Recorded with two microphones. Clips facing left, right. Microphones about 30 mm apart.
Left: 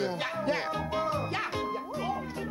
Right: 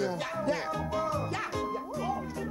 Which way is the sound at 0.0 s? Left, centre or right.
Left.